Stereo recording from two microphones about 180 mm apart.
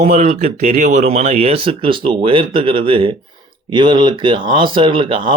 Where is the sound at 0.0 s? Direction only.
40° right (ahead or behind).